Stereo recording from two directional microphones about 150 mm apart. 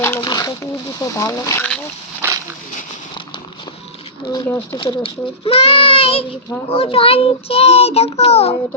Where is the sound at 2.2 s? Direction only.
15° right (ahead or behind).